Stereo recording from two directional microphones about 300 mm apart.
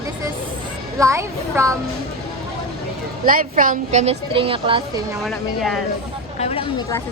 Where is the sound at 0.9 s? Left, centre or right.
Centre.